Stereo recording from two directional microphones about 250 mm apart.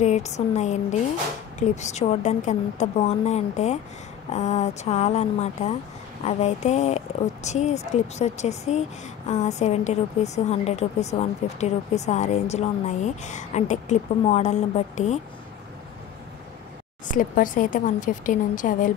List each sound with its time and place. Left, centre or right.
0.0 s a woman's voice: left
17.1 s a woman's voice: left